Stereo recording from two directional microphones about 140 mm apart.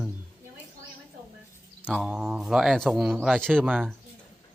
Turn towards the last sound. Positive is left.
turn(degrees=5)  # may be behind; listen again after turning